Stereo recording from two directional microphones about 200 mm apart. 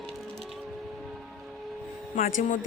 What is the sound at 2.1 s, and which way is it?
Speech, 40° left (ahead or behind).